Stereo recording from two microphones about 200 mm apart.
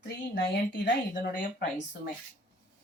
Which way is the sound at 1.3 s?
45° left (ahead or behind).